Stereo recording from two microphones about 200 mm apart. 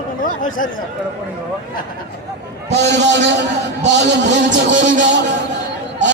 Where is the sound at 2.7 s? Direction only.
60° right (ahead or behind).